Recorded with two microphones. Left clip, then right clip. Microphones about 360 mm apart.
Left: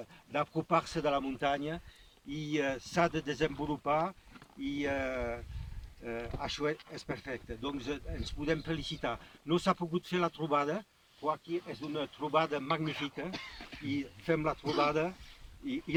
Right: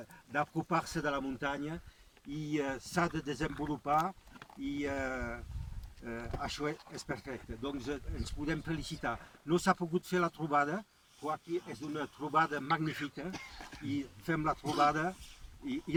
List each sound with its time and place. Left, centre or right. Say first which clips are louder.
0.3 s speech: left 2 dB; centre